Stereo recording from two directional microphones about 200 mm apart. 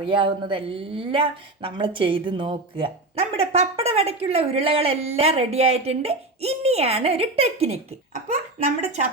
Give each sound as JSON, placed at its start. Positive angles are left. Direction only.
{"t": 0.0, "sound": "speech", "side_deg": -25}